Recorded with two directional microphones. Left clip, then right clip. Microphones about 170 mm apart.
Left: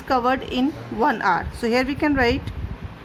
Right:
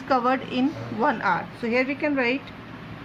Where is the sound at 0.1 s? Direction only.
35° left (ahead or behind); by 2.4 s 55° left (ahead or behind).